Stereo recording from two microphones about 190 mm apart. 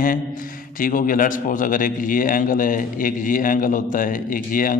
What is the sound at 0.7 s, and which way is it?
A man's voice, 45° left (ahead or behind).